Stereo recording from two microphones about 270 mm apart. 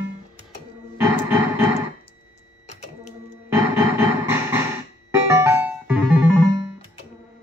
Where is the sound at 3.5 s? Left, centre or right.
Centre.